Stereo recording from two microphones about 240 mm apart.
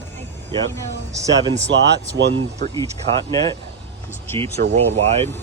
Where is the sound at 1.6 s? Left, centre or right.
Right.